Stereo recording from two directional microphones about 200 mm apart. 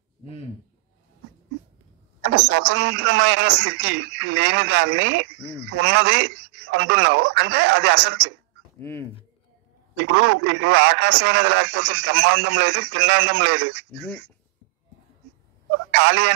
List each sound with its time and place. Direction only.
2.3 s a man's voice: 70° right (ahead or behind)
8.7 s speech: 10° left (ahead or behind)
9.9 s a man's voice: 65° right (ahead or behind)
15.9 s a man's voice: 65° right (ahead or behind)